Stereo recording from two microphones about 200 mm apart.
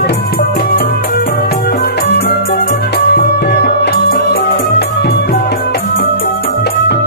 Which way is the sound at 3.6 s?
50° left (ahead or behind).